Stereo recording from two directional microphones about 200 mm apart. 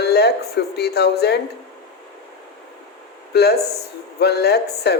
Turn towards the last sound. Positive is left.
turn(degrees=55)  # may be behind; listen again after turning